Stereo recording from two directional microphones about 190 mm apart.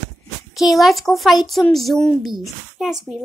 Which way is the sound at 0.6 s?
Centre (ahead or behind).